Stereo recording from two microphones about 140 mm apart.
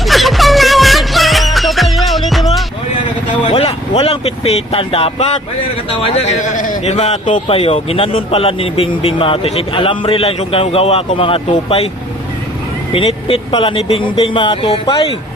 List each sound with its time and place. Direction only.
0.0 s music: centre (ahead or behind)
3.4 s vehicle: 45° left (ahead or behind)
4.0 s a man's voice: 45° left (ahead or behind)
7.4 s a man's voice: 40° left (ahead or behind)
12.9 s speech: 40° left (ahead or behind)